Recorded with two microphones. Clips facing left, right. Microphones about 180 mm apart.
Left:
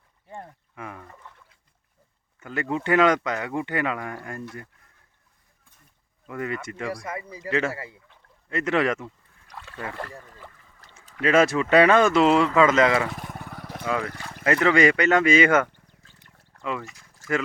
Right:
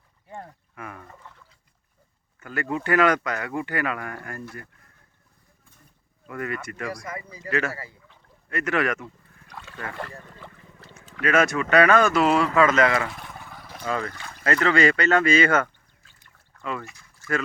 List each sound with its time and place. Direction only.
0.3 s speech: 5° right (ahead or behind)
0.8 s speech: 20° left (ahead or behind)
2.4 s speech: 20° left (ahead or behind)
6.2 s speech: 20° left (ahead or behind)
9.6 s a sound: centre (ahead or behind)
9.8 s speech: 10° left (ahead or behind)
10.9 s speech: 25° left (ahead or behind)
13.1 s a sound: 45° left (ahead or behind)
13.8 s speech: 5° left (ahead or behind)
14.4 s speech: 15° left (ahead or behind)
16.9 s a sound: 45° left (ahead or behind)